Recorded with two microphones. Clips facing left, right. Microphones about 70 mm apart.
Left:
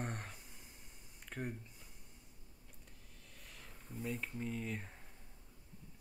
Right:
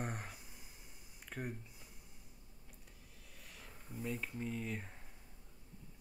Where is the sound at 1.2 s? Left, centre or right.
Centre.